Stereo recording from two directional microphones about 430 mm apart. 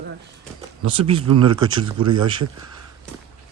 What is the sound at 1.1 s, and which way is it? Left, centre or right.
Speech, centre.